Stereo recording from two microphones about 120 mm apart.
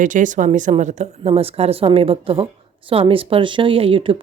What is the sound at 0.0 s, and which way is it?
A woman's voice, 90° right.